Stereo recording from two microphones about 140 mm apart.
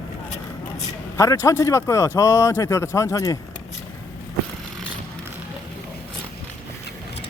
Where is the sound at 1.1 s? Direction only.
25° left (ahead or behind).